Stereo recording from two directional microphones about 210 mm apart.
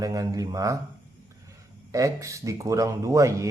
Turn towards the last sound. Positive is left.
turn(degrees=-15)  # may be behind; listen again after turning